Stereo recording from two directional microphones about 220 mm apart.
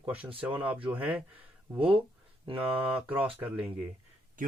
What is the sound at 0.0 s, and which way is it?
Speech, 5° right (ahead or behind).